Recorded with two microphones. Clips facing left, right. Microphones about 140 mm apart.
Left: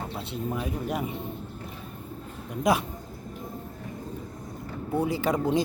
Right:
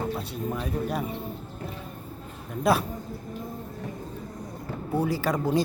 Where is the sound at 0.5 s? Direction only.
20° left (ahead or behind).